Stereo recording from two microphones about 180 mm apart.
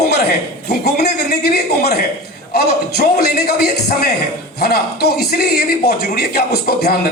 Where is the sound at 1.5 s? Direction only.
60° left (ahead or behind).